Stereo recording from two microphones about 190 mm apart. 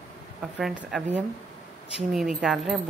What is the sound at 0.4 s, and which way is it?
Speech, centre (ahead or behind).